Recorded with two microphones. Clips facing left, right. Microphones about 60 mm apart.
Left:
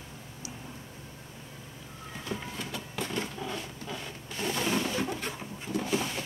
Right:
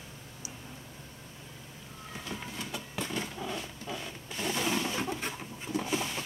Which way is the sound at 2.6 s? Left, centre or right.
Centre.